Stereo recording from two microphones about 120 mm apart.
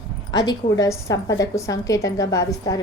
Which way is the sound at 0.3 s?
30° left (ahead or behind).